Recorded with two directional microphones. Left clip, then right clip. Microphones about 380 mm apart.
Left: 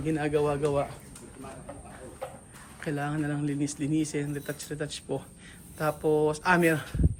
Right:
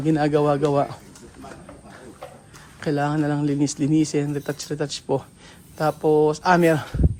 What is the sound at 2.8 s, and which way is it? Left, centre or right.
Speech, centre.